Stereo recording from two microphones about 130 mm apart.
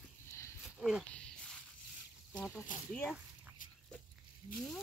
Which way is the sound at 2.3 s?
15° left (ahead or behind).